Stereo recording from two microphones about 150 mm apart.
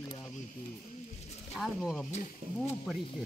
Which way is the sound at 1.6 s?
Centre (ahead or behind).